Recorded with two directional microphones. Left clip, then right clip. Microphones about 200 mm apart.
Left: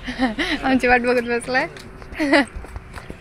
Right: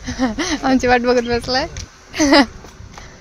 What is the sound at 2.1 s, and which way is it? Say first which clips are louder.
Speech: right 5 dB; 40° right (ahead or behind).